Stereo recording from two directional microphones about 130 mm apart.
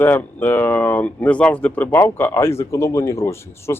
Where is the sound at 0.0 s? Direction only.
15° left (ahead or behind).